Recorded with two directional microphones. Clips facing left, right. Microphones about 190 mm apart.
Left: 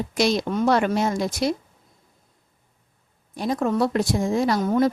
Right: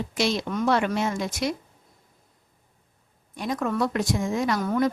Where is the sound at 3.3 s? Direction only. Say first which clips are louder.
Left 4 dB; 35° left (ahead or behind).